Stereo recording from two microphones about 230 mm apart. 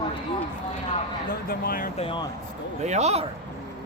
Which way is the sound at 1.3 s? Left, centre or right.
Left.